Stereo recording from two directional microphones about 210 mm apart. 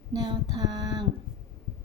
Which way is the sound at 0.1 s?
20° right (ahead or behind).